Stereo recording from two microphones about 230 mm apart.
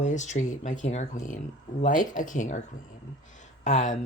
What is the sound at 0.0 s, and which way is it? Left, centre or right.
Speech, left.